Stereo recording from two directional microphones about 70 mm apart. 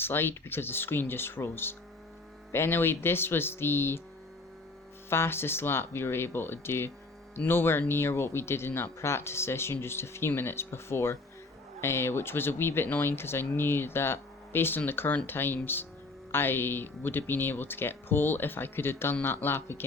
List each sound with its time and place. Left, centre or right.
0.0 s speech: left
5.0 s speech: left